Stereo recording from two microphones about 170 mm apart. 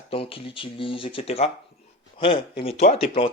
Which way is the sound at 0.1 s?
35° left (ahead or behind).